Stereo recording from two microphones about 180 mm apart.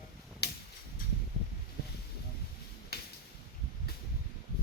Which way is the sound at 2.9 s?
60° left (ahead or behind).